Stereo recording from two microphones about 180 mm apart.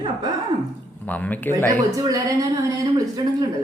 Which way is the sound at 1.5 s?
20° right (ahead or behind).